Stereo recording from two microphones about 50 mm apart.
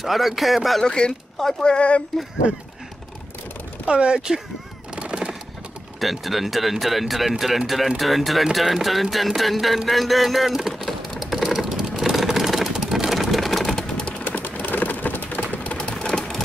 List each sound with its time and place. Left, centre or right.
0.0 s speech: centre
0.8 s speech: centre
3.8 s speech: centre
4.9 s fowl: centre
5.9 s speech: centre
10.7 s vehicle: centre
14.2 s a sound: left
15.9 s sewing machine: centre